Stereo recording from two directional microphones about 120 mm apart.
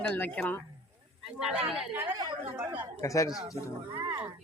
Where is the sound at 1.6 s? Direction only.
5° right (ahead or behind).